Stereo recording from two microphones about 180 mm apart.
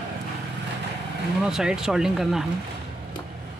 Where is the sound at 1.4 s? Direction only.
5° right (ahead or behind).